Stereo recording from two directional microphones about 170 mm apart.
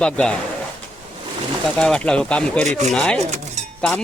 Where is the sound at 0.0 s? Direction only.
5° left (ahead or behind).